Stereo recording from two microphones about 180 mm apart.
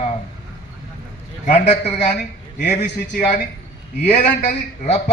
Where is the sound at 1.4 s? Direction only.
35° left (ahead or behind).